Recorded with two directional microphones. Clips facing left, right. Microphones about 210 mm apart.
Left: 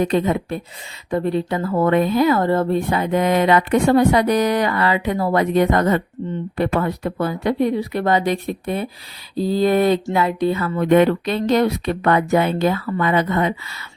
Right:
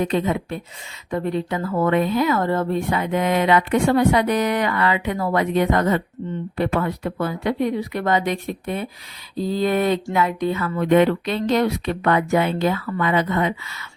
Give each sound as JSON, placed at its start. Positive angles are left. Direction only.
{"t": 0.0, "sound": "speech", "side_deg": 40}